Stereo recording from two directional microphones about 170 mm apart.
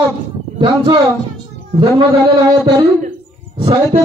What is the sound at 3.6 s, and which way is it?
Speech, 35° right (ahead or behind).